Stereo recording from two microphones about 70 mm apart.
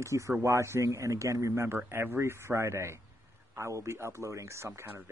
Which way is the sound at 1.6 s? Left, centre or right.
Right.